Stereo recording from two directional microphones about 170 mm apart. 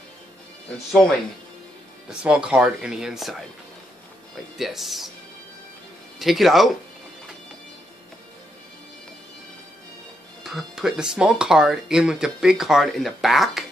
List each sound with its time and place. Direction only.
2.0 s speech: 5° right (ahead or behind)
4.6 s speech: centre (ahead or behind)
6.1 s speech: centre (ahead or behind)
10.4 s speech: 5° right (ahead or behind)